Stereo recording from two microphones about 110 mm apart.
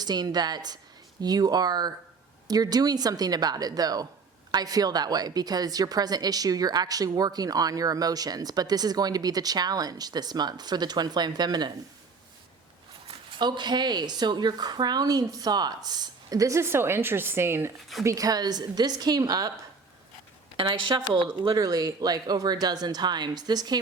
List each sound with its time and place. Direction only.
0.0 s a woman's voice: 40° right (ahead or behind)
13.4 s a woman's voice: 40° right (ahead or behind); by 17.7 s 20° right (ahead or behind)
17.7 s speech: centre (ahead or behind)
18.0 s a woman's voice: 30° right (ahead or behind)
20.6 s a woman's voice: 45° right (ahead or behind)
21.5 s a woman's voice: 35° right (ahead or behind)